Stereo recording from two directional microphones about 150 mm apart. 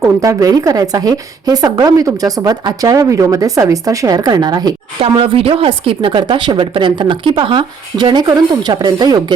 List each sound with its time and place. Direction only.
0.0 s a woman's voice: 20° right (ahead or behind)
4.9 s a woman's voice: 40° right (ahead or behind)